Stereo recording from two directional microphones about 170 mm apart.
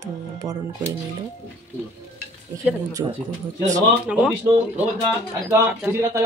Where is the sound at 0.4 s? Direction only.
20° right (ahead or behind).